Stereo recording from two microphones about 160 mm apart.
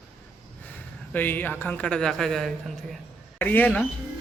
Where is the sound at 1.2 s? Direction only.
10° left (ahead or behind).